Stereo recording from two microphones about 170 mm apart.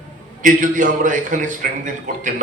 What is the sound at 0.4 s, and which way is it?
A man's voice, 50° right (ahead or behind).